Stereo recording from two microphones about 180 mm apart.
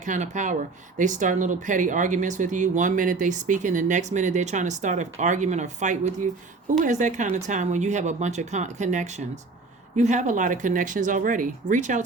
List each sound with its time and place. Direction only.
0.0 s speech: 45° right (ahead or behind)